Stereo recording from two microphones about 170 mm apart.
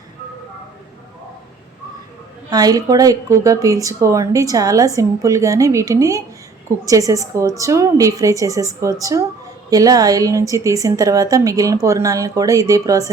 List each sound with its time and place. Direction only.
2.5 s speech: 20° right (ahead or behind)